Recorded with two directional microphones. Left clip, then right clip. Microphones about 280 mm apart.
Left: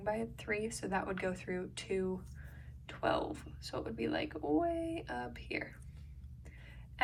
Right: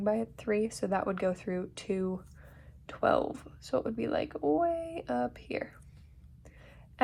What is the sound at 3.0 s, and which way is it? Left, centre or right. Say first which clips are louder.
Speech: right 7 dB; right.